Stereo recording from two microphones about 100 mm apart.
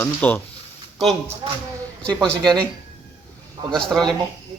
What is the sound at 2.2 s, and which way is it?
Speech, 10° left (ahead or behind).